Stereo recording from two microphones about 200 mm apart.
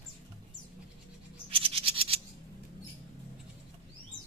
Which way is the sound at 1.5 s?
30° right (ahead or behind).